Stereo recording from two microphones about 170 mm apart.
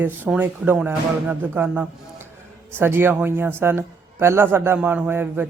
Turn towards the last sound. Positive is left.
turn(degrees=-15)  # may be behind; listen again after turning